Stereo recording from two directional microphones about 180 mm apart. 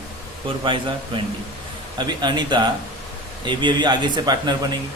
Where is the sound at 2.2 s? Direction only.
25° right (ahead or behind).